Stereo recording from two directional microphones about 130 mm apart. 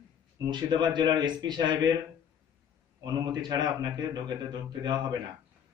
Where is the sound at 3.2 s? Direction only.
35° right (ahead or behind).